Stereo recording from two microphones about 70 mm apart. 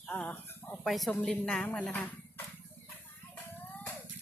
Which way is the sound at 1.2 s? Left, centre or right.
Centre.